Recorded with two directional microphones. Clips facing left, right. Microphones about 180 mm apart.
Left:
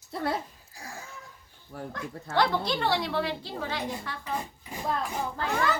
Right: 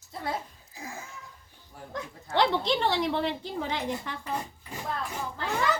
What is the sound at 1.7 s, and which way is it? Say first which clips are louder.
Dog: left 8 dB; 75° left (ahead or behind).